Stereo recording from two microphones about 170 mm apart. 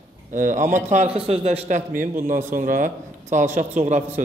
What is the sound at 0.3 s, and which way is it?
A man's voice, 50° right (ahead or behind).